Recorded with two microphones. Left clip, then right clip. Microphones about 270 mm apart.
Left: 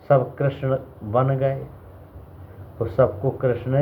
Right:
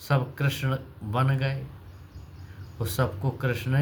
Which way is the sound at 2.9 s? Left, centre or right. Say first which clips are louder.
Left 10 dB; right.